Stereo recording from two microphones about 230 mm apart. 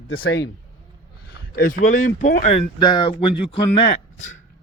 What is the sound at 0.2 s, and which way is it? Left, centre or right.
A man's voice, left.